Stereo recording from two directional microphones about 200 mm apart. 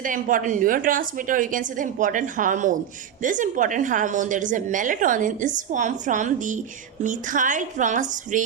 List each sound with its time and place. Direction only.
0.0 s a woman's voice: 40° right (ahead or behind)